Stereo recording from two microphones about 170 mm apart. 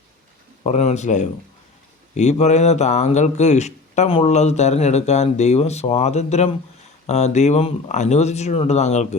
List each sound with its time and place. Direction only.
0.6 s speech: 40° left (ahead or behind)